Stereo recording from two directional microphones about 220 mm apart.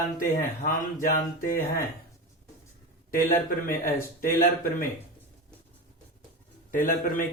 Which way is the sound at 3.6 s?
40° left (ahead or behind).